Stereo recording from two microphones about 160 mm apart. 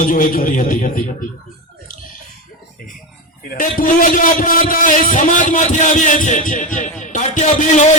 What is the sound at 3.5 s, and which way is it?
A man's voice, 55° left (ahead or behind).